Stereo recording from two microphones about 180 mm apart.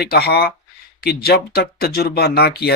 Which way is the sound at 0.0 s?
60° left (ahead or behind).